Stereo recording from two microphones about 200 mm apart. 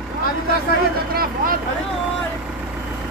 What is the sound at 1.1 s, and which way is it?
Speech, 50° right (ahead or behind).